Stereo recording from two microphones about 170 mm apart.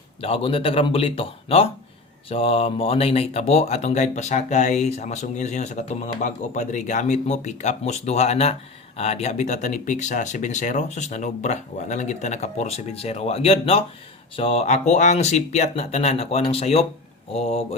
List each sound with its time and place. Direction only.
0.2 s speech: 35° left (ahead or behind)